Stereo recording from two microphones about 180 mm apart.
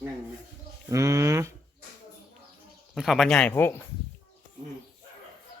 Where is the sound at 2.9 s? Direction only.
Centre (ahead or behind).